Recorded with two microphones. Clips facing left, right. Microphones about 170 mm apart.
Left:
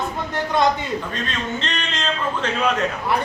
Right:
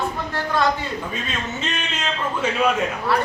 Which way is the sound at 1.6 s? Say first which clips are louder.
Left 1 dB; 5° right (ahead or behind).